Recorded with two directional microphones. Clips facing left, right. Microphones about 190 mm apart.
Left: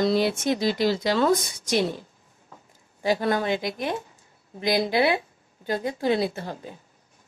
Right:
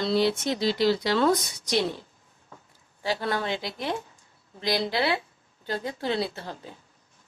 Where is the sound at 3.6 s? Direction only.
50° left (ahead or behind).